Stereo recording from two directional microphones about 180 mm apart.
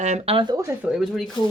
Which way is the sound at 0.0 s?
35° right (ahead or behind).